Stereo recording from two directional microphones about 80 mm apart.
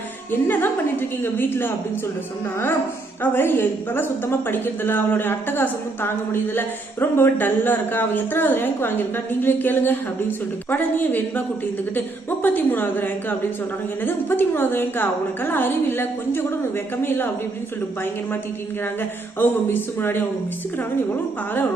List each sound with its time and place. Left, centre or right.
0.3 s a woman's voice: left
3.3 s a woman's voice: left
19.4 s a woman's voice: left